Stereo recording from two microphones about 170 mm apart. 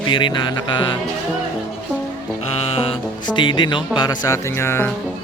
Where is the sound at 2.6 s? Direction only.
35° left (ahead or behind).